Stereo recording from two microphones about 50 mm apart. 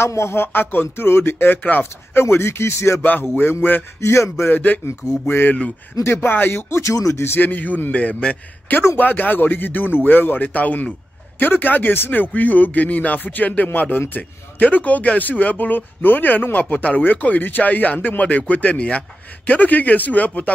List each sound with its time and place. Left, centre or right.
0.0 s speech: left
2.2 s speech: left
3.0 s speech: left
4.0 s speech: left
4.5 s speech: left
6.7 s speech: left
7.2 s speech: left
8.9 s speech: left